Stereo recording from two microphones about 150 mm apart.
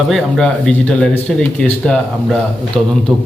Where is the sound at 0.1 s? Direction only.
Centre (ahead or behind).